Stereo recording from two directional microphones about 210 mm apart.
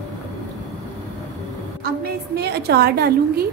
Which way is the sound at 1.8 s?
50° right (ahead or behind).